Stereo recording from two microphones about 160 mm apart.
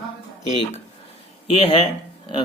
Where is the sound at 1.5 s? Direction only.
35° left (ahead or behind).